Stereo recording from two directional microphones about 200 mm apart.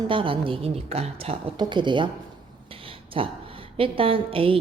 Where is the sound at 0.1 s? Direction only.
25° right (ahead or behind).